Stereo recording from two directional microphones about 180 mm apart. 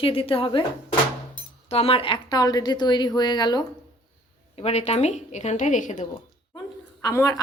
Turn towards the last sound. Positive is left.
turn(degrees=20)  # may be behind; listen again after turning